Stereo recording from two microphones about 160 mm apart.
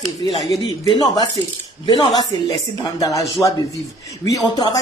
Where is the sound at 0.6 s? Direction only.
25° left (ahead or behind).